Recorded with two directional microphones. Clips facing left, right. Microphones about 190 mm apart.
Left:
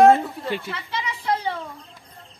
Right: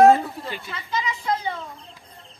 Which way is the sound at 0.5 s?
65° left (ahead or behind).